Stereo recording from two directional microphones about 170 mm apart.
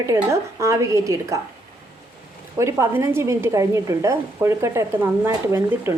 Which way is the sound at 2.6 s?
15° right (ahead or behind).